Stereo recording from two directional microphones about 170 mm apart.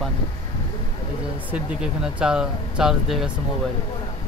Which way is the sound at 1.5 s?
5° right (ahead or behind).